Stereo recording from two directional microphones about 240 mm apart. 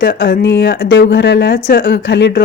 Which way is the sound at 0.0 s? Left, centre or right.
Left.